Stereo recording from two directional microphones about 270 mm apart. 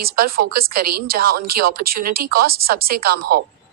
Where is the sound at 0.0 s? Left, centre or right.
Right.